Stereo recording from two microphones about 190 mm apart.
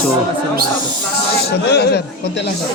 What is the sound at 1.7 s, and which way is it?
Speech, 60° left (ahead or behind).